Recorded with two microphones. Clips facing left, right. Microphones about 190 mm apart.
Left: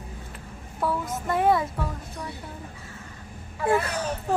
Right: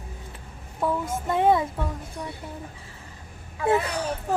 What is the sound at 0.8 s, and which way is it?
Speech, 25° right (ahead or behind).